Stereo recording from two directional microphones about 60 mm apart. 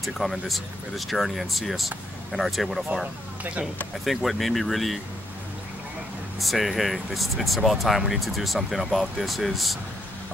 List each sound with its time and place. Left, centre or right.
0.0 s speech: centre
2.9 s speech: right
4.0 s speech: centre
6.4 s speech: centre